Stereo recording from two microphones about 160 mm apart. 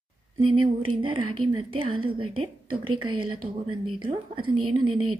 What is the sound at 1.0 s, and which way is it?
A woman's voice, 30° right (ahead or behind).